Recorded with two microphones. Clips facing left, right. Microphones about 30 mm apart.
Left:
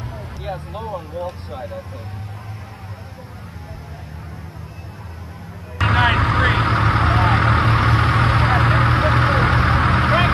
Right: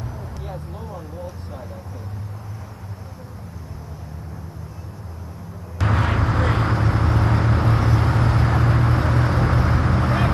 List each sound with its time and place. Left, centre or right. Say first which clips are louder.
0.0 s speech: left 3 dB; left
5.8 s vehicle: left 6 dB; left